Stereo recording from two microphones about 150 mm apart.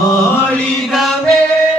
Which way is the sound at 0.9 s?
Centre (ahead or behind).